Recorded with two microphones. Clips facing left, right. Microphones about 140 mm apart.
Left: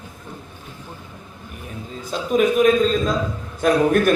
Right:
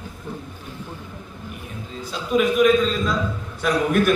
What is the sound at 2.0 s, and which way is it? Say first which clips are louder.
A man's voice: left 2 dB; 45° left (ahead or behind).